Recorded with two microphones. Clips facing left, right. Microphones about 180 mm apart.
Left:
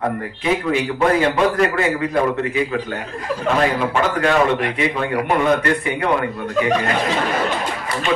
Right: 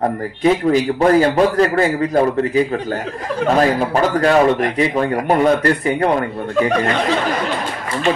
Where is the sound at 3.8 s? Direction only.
40° right (ahead or behind).